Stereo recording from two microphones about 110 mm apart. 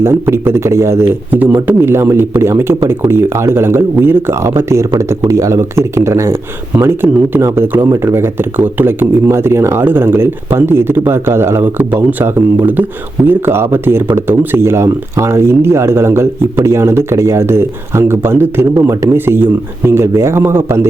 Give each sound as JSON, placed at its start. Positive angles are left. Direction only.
{"t": 0.0, "sound": "speech", "side_deg": -20}